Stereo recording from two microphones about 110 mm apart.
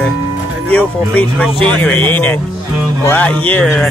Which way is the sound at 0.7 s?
15° left (ahead or behind).